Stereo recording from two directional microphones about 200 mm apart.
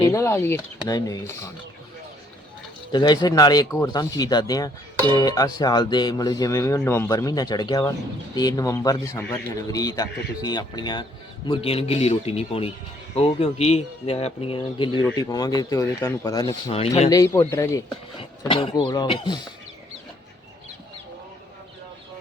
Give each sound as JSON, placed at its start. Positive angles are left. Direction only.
{"t": 0.0, "sound": "speech", "side_deg": 15}
{"t": 2.9, "sound": "speech", "side_deg": 20}
{"t": 16.7, "sound": "speech", "side_deg": 30}
{"t": 17.1, "sound": "speech", "side_deg": 15}
{"t": 18.2, "sound": "speech", "side_deg": 25}